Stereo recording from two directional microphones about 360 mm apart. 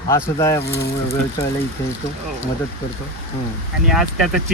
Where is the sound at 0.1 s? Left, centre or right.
Centre.